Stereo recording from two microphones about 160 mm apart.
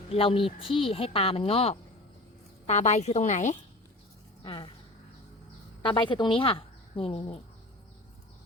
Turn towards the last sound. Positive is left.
turn(degrees=35)  # may be behind; listen again after turning